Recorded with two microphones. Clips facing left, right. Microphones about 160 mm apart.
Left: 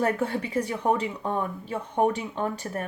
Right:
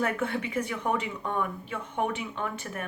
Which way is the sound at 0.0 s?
35° left (ahead or behind).